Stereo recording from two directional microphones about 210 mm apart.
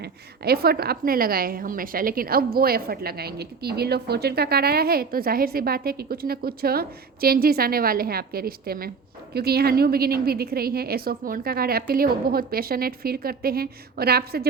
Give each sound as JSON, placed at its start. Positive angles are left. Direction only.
{"t": 0.0, "sound": "a woman's voice", "side_deg": -50}